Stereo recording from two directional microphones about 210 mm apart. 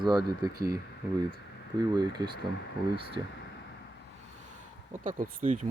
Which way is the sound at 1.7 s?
20° right (ahead or behind).